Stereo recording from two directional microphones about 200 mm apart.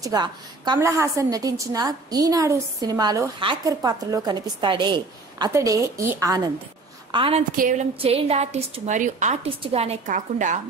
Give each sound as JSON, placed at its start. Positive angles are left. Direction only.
{"t": 0.0, "sound": "a woman's voice", "side_deg": -20}